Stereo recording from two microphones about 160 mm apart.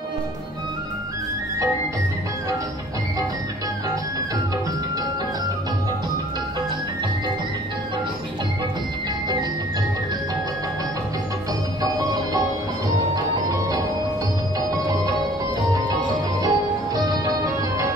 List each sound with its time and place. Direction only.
11.8 s music: 25° right (ahead or behind)
16.4 s music: 25° right (ahead or behind)